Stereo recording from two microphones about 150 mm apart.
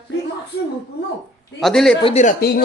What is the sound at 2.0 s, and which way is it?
Speech, 45° left (ahead or behind).